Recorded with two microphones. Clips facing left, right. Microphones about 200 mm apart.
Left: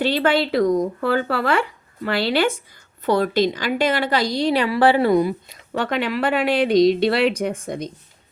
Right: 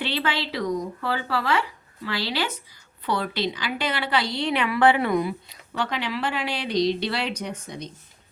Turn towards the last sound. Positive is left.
turn(degrees=50)  # may be behind; listen again after turning